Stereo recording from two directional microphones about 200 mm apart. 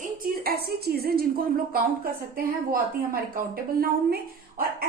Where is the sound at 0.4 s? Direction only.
50° right (ahead or behind).